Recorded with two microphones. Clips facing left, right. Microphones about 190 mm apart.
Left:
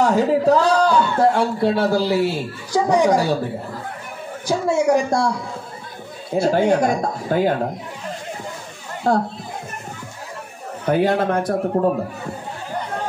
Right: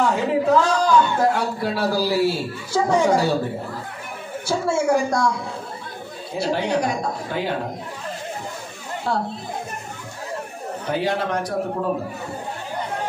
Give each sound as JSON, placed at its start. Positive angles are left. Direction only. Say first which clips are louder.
{"t": 0.0, "sound": "a man's voice", "louder": "left 4 dB", "side_deg": 40}
{"t": 4.5, "sound": "a woman's voice", "louder": "left 3 dB", "side_deg": 15}
{"t": 6.3, "sound": "speech", "louder": "left 6 dB", "side_deg": 50}
{"t": 9.1, "sound": "speech", "louder": "left 6 dB", "side_deg": 45}
{"t": 10.9, "sound": "a man's voice", "louder": "left 6 dB", "side_deg": 55}